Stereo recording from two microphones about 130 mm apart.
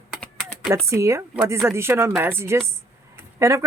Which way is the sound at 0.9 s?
20° right (ahead or behind).